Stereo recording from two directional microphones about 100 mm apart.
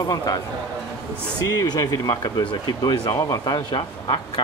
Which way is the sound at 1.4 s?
40° left (ahead or behind).